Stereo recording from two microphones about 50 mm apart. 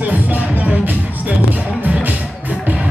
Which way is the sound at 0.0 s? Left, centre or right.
Right.